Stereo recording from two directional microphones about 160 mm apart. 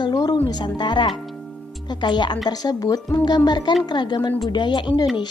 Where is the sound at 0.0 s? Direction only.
25° left (ahead or behind).